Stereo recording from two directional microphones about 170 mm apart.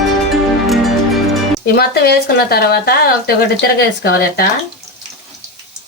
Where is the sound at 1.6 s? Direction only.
65° left (ahead or behind).